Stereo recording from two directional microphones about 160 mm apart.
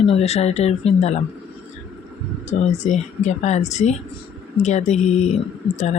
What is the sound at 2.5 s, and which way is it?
Speech, 45° left (ahead or behind).